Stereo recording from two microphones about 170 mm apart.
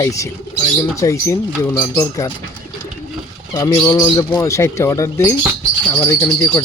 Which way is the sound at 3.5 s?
20° left (ahead or behind).